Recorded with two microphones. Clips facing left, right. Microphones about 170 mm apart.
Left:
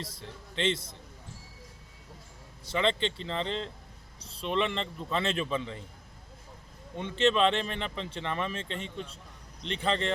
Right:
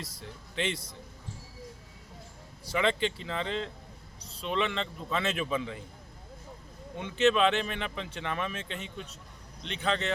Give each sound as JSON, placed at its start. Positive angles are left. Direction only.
{"t": 0.0, "sound": "speech", "side_deg": 30}
{"t": 2.7, "sound": "speech", "side_deg": -5}
{"t": 4.4, "sound": "speech", "side_deg": 0}
{"t": 6.9, "sound": "speech", "side_deg": -5}
{"t": 8.5, "sound": "speech", "side_deg": 30}
{"t": 9.6, "sound": "speech", "side_deg": -5}